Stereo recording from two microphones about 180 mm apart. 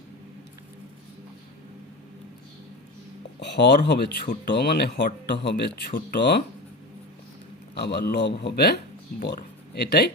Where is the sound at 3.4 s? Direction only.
70° left (ahead or behind).